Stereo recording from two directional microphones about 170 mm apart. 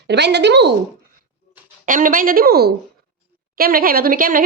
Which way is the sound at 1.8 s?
55° right (ahead or behind).